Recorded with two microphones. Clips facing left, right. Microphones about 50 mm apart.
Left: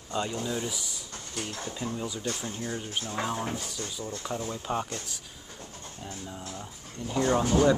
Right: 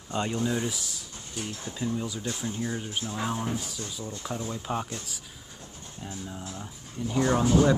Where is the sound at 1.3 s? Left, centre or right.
Left.